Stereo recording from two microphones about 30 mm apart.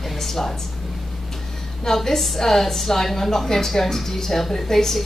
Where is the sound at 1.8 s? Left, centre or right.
Centre.